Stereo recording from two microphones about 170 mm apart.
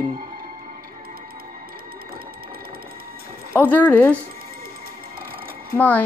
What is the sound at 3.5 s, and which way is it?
Speech, 10° left (ahead or behind).